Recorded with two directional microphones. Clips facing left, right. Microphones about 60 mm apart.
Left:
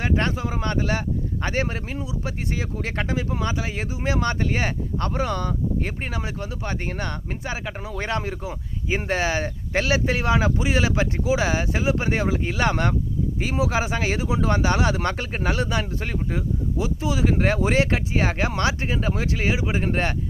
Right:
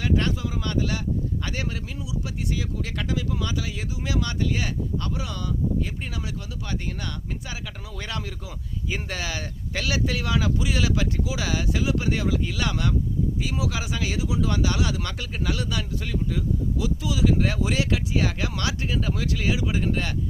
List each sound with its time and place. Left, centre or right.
0.0 s speech: left